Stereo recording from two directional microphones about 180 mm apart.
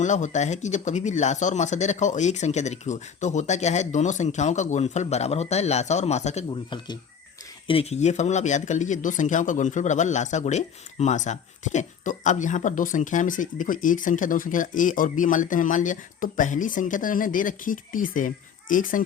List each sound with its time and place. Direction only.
0.0 s speech: 40° left (ahead or behind)